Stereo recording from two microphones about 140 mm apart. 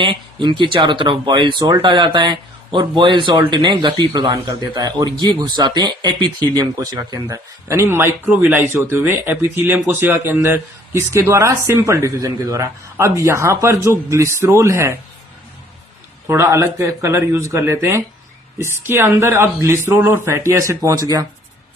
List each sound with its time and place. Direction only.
0.0 s speech: 35° right (ahead or behind); by 14.9 s 20° right (ahead or behind)
16.2 s speech: 20° right (ahead or behind)